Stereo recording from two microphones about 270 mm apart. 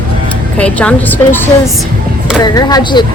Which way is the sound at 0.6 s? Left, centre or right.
Centre.